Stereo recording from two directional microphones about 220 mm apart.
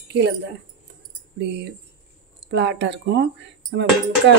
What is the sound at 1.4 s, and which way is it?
Speech, 50° right (ahead or behind).